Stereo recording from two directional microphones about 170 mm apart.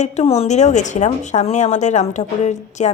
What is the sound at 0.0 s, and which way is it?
A woman's voice, 40° left (ahead or behind).